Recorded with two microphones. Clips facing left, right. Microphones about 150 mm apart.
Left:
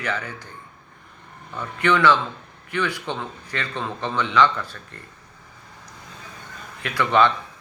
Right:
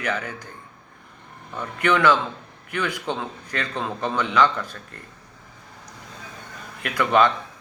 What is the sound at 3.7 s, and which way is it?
Speech, 10° right (ahead or behind).